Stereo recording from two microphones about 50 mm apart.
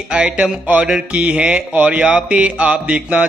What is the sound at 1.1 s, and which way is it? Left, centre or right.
Mantra, right.